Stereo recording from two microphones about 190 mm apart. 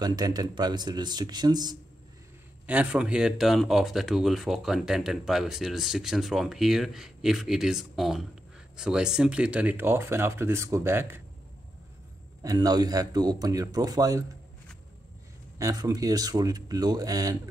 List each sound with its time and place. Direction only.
0.0 s speech: 20° right (ahead or behind)
2.6 s speech: 10° right (ahead or behind)
12.4 s speech: 20° right (ahead or behind)
15.6 s speech: 20° right (ahead or behind)